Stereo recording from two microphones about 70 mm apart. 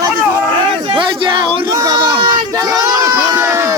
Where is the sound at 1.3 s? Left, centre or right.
Right.